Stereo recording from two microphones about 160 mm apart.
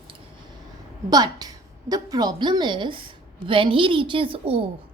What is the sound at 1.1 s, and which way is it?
A woman's voice, 25° right (ahead or behind).